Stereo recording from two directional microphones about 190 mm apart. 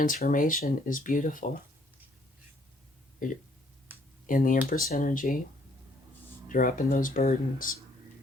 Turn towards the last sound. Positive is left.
turn(degrees=45)  # may be behind; listen again after turning